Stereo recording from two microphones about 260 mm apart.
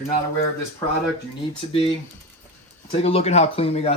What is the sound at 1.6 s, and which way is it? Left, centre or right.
Speech, left.